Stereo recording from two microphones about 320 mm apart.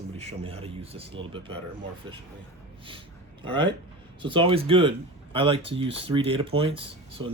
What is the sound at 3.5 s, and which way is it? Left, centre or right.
Speech, centre.